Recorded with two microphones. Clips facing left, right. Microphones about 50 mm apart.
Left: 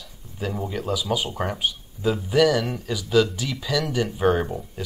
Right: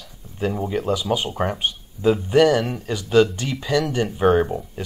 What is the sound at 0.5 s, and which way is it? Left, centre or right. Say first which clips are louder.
Speech: right 3 dB; right.